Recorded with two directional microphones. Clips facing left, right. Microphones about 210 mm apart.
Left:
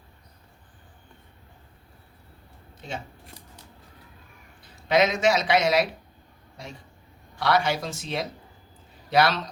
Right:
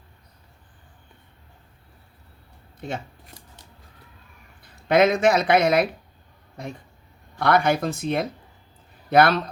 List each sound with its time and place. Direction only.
4.6 s speech: 55° right (ahead or behind)
7.3 s speech: 55° right (ahead or behind)